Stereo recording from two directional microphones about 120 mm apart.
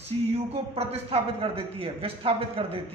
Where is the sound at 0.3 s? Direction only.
60° right (ahead or behind).